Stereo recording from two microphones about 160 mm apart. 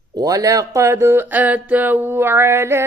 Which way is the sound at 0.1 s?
25° right (ahead or behind).